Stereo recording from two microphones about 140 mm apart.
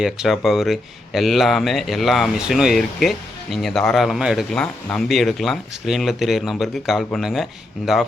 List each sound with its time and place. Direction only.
0.0 s speech: 5° right (ahead or behind)
4.5 s speech: 10° left (ahead or behind)